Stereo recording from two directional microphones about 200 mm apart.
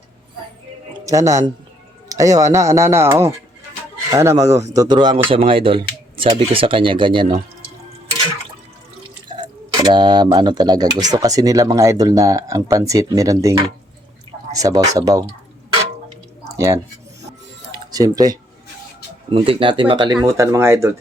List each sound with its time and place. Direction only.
1.0 s speech: 15° right (ahead or behind)
9.3 s speech: 25° right (ahead or behind)
16.4 s a sound: 15° right (ahead or behind)
17.7 s music: 20° right (ahead or behind)
19.3 s speech: 25° right (ahead or behind)